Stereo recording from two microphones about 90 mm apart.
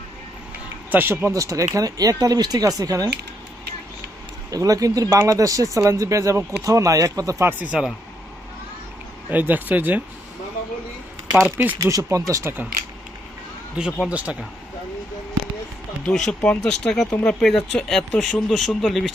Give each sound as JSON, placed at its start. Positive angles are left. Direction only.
{"t": 0.9, "sound": "speech", "side_deg": -20}
{"t": 1.3, "sound": "speech", "side_deg": -35}
{"t": 4.5, "sound": "speech", "side_deg": -40}
{"t": 7.6, "sound": "speech", "side_deg": -10}
{"t": 9.3, "sound": "speech", "side_deg": -20}
{"t": 11.8, "sound": "speech", "side_deg": -40}
{"t": 13.7, "sound": "speech", "side_deg": -10}
{"t": 16.0, "sound": "speech", "side_deg": 10}